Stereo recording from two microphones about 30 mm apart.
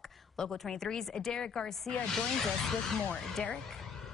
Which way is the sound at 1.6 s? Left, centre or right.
Centre.